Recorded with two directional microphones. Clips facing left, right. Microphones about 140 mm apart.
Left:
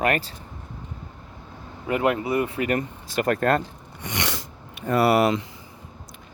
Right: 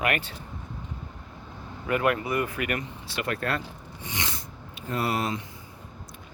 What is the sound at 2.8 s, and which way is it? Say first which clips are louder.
Speech: left 7 dB; 45° left (ahead or behind).